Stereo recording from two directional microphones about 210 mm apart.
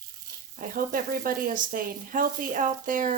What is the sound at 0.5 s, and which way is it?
Speech, 40° right (ahead or behind).